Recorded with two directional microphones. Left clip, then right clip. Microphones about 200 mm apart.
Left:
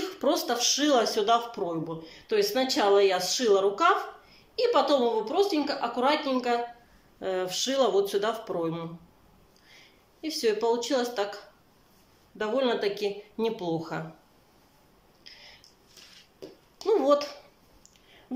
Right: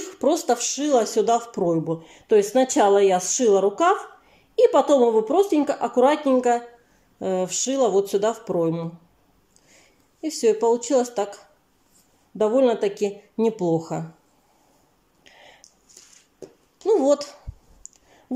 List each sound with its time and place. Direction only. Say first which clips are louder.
0.0 s speech: right 5 dB; 25° right (ahead or behind)
5.3 s speech: right 6 dB; 35° right (ahead or behind)
10.2 s speech: right 6 dB; 25° right (ahead or behind)
16.3 s a sound: right 2 dB; 25° right (ahead or behind)
17.8 s clicking: right 13 dB; 25° right (ahead or behind)